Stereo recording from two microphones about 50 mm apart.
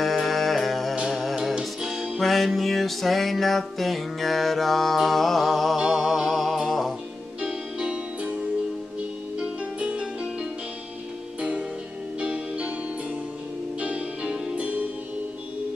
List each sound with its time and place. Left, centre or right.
0.0 s music: centre
7.4 s music: right
9.4 s music: right
12.2 s music: right
13.7 s music: right